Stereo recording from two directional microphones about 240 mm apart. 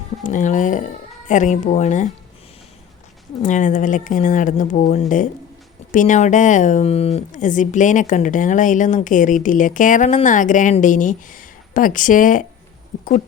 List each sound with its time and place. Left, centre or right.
0.2 s speech: left
3.4 s speech: left